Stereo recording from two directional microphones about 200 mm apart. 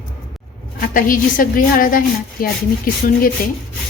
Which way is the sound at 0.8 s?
45° left (ahead or behind).